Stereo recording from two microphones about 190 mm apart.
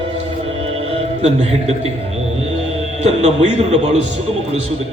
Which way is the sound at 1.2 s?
35° right (ahead or behind).